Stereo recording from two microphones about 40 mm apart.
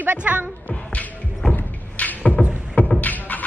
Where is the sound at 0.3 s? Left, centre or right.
Right.